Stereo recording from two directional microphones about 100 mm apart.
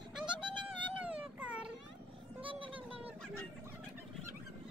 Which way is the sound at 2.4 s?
65° right (ahead or behind).